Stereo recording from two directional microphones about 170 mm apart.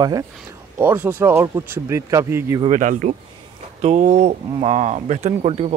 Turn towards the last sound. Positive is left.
turn(degrees=-40)  # may be behind; listen again after turning